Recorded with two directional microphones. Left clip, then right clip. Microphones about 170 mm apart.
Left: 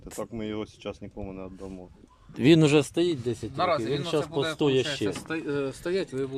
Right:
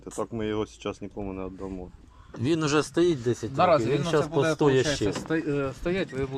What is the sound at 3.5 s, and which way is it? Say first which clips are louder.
Speech: right 5 dB; 10° right (ahead or behind).